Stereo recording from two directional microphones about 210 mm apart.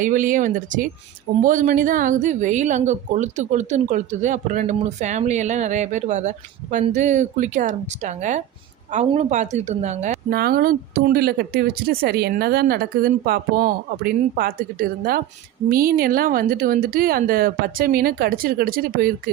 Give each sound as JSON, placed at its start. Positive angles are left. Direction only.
{"t": 0.0, "sound": "a woman's voice", "side_deg": -40}